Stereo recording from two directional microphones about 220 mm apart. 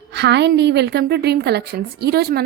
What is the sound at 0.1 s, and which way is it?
A woman's voice, 50° right (ahead or behind).